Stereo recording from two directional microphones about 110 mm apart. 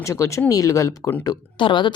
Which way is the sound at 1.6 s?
45° left (ahead or behind).